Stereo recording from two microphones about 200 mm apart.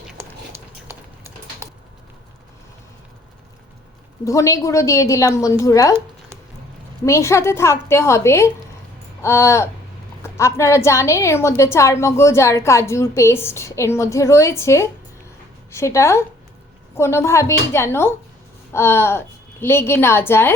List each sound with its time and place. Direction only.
0.2 s a sound: 10° right (ahead or behind)
4.3 s a woman's voice: 15° left (ahead or behind)
7.0 s a woman's voice: 15° left (ahead or behind)